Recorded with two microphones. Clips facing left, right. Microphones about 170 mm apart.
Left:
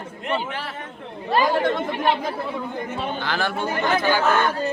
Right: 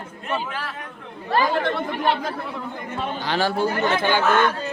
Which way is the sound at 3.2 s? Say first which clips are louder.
Right 6 dB; 35° right (ahead or behind).